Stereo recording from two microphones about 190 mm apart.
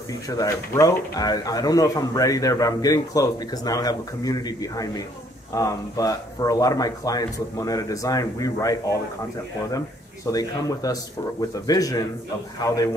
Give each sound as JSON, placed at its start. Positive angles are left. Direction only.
{"t": 0.3, "sound": "speech", "side_deg": 15}
{"t": 10.3, "sound": "speech", "side_deg": 20}